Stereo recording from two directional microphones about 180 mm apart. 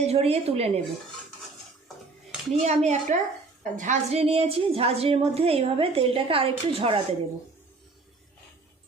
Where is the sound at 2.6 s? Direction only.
40° right (ahead or behind).